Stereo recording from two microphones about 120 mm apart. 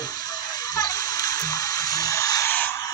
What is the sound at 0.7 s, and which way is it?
Water, 30° left (ahead or behind).